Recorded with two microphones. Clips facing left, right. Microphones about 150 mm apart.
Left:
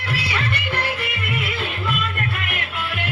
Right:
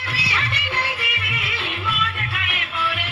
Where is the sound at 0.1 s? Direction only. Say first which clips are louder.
Left 3 dB; 55° left (ahead or behind).